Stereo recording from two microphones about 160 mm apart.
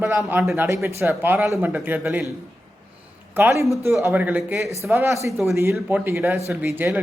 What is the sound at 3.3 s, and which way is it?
A man's voice, 15° right (ahead or behind).